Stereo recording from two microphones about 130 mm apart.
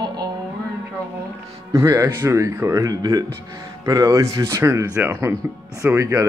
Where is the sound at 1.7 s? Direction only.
25° right (ahead or behind).